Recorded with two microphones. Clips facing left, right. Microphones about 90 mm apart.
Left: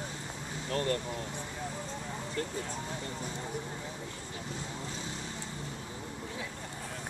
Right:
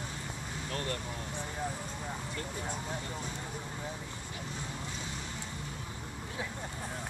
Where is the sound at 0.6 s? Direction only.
35° left (ahead or behind).